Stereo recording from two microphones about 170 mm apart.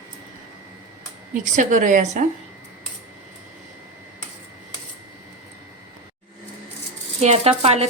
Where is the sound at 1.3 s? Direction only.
50° right (ahead or behind).